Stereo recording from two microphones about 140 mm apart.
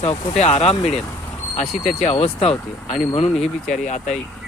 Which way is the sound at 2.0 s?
50° left (ahead or behind).